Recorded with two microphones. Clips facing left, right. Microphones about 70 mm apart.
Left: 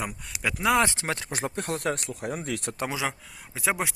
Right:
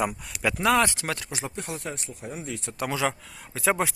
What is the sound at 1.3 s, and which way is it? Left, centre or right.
Speech, left.